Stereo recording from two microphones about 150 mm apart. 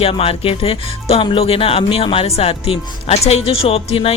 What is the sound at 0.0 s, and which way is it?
Speech, 40° left (ahead or behind).